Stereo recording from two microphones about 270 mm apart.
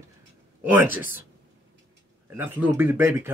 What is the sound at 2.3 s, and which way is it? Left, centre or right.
A man's voice, centre.